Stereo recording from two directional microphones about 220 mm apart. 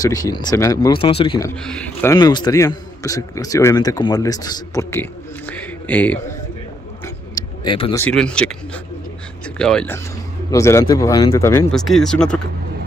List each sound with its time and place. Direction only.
0.0 s a man's voice: 15° left (ahead or behind)
1.6 s a man's voice: 5° left (ahead or behind)
5.5 s a sound: 5° left (ahead or behind)
7.3 s a sound: 20° left (ahead or behind)
8.0 s speech: 5° left (ahead or behind)
10.5 s a man's voice: 15° left (ahead or behind)
11.7 s speech: centre (ahead or behind)